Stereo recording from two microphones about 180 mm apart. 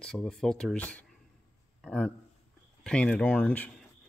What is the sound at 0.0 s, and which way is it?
Speech, 5° left (ahead or behind).